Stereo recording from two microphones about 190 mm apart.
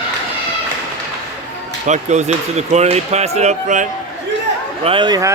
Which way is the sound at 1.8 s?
40° right (ahead or behind).